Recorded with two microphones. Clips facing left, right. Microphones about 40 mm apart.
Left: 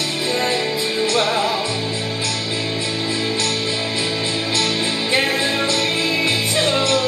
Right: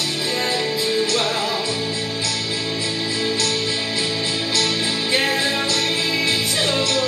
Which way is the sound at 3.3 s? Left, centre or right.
Left.